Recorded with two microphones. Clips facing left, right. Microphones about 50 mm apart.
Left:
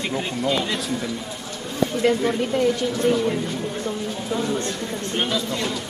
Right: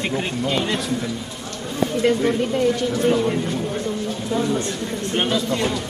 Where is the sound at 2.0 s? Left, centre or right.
Centre.